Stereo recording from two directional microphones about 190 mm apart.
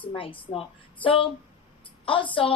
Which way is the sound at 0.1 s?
25° left (ahead or behind).